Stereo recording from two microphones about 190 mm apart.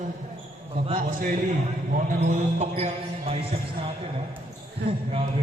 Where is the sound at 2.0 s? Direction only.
40° right (ahead or behind).